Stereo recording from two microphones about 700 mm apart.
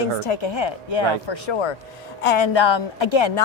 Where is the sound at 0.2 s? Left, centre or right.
Left.